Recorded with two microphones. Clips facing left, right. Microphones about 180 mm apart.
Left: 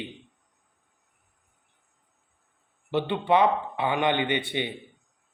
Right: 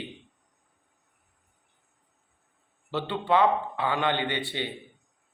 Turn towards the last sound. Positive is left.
turn(degrees=15)  # may be behind; listen again after turning